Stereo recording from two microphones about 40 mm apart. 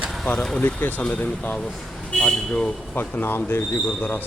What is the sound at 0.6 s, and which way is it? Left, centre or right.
Speech, left.